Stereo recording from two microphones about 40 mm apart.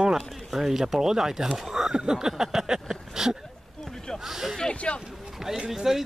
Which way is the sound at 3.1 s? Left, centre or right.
Centre.